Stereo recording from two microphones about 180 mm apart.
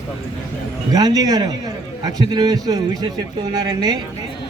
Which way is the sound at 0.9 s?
20° right (ahead or behind).